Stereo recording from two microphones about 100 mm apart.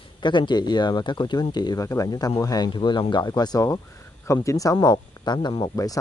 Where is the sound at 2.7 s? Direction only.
50° left (ahead or behind).